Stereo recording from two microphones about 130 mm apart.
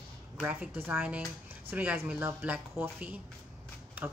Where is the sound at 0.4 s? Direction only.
10° right (ahead or behind).